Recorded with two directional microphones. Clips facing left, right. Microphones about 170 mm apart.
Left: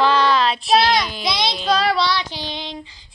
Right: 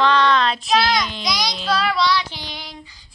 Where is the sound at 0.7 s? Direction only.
30° left (ahead or behind).